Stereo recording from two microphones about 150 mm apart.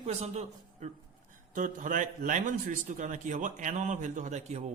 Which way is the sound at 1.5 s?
60° right (ahead or behind).